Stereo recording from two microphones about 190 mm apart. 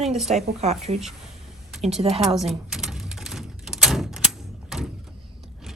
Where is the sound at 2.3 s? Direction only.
Centre (ahead or behind).